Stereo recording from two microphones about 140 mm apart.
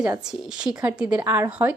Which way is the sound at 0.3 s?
5° right (ahead or behind).